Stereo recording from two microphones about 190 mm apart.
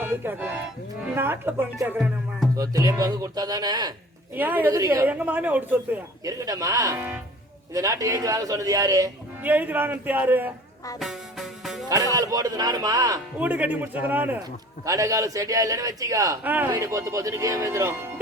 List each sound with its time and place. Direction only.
0.0 s a man's voice: 10° right (ahead or behind)
2.6 s speech: 20° right (ahead or behind)
4.4 s a man's voice: 10° right (ahead or behind)
11.0 s music: centre (ahead or behind)
12.1 s speech: 20° right (ahead or behind)
13.4 s a man's voice: 10° right (ahead or behind)